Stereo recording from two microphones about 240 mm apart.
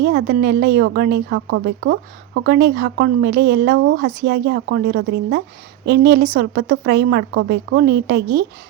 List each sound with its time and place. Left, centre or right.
0.0 s speech: right
1.5 s speech: right